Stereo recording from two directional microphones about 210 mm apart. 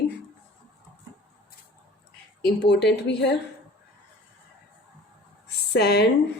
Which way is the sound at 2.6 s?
55° left (ahead or behind).